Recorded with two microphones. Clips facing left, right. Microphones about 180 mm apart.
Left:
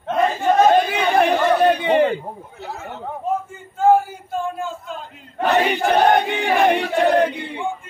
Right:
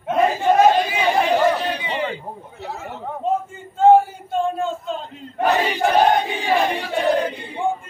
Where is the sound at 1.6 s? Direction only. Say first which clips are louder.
Left 9 dB; 55° left (ahead or behind).